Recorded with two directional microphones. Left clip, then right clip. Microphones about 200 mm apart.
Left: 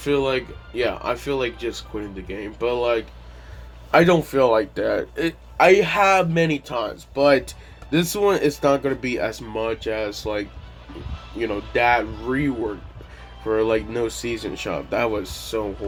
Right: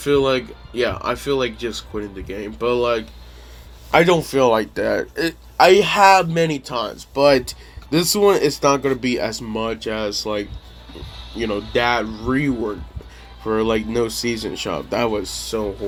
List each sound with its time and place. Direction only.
0.0 s speech: 40° right (ahead or behind)
6.3 s speech: 35° right (ahead or behind)
6.7 s speech: 45° right (ahead or behind)
11.7 s speech: 40° right (ahead or behind)